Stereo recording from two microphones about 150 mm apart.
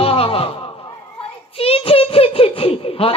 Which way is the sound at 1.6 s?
40° left (ahead or behind).